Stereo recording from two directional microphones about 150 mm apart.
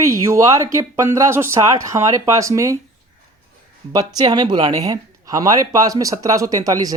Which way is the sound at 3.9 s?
25° right (ahead or behind).